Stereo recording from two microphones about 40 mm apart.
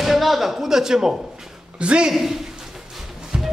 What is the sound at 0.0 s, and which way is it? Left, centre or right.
Speech, centre.